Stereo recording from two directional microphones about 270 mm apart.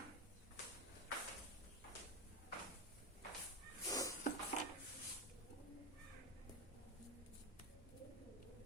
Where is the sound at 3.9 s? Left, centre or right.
Centre.